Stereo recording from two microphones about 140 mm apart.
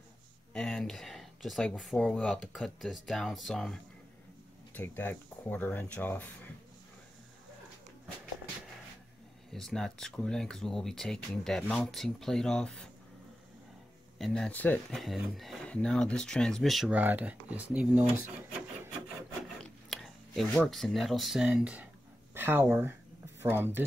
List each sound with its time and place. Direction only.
0.5 s speech: 5° left (ahead or behind)
4.7 s speech: 15° left (ahead or behind)
9.5 s speech: 5° left (ahead or behind)
14.1 s speech: centre (ahead or behind)
14.9 s speech: centre (ahead or behind)
17.0 s speech: 10° right (ahead or behind)
19.6 s speech: centre (ahead or behind); by 23.8 s 15° right (ahead or behind)